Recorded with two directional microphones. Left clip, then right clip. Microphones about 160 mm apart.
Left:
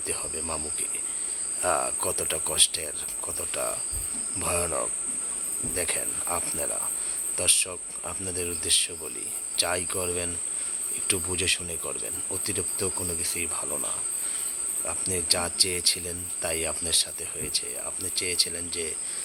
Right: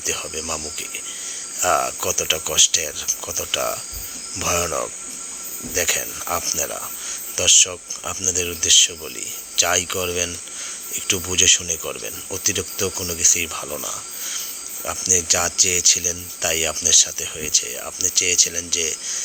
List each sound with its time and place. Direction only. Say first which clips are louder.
0.0 s speech: right 8 dB; 15° right (ahead or behind)
13.0 s speech: right 6 dB; 30° right (ahead or behind)
13.2 s speech: right 12 dB; 15° right (ahead or behind)